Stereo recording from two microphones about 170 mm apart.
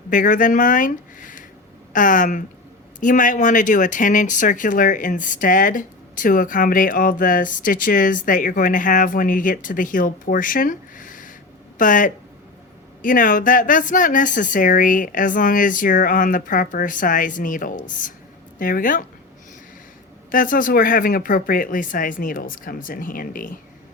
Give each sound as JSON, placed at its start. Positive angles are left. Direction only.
{"t": 0.1, "sound": "speech", "side_deg": 50}
{"t": 20.3, "sound": "speech", "side_deg": 55}